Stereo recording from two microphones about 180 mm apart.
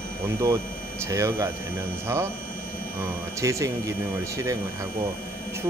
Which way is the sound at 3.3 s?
15° right (ahead or behind).